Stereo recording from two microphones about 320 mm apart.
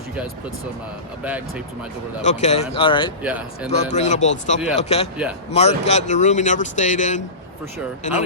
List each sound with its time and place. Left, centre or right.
1.2 s speech: centre
2.2 s speech: left
3.2 s speech: centre
3.7 s speech: left